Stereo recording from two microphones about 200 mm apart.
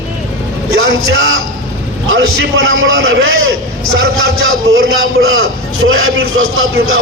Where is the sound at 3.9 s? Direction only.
90° right.